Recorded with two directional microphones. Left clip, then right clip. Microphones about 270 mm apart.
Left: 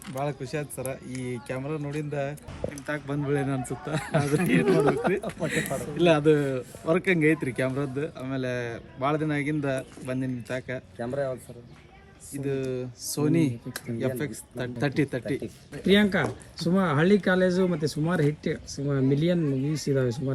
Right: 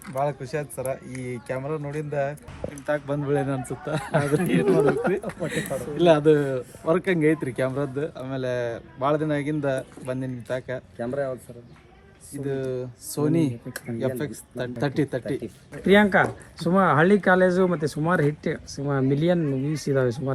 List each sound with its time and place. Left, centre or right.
0.1 s speech: centre
10.9 s speech: left
12.3 s speech: centre
16.2 s speech: centre
16.7 s speech: centre
17.5 s speech: centre